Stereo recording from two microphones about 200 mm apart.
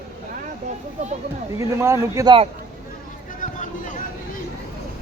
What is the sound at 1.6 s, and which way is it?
Speech, 15° right (ahead or behind).